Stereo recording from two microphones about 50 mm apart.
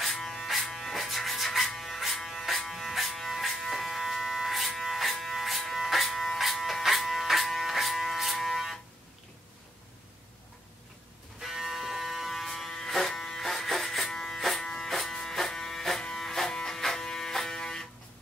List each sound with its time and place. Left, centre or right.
0.0 s music: centre
11.3 s electric shaver: centre